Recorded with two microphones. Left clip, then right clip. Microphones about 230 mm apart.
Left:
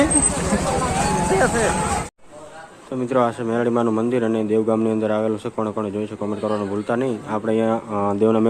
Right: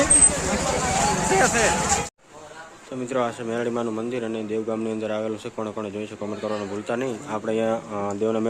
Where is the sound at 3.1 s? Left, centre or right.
Centre.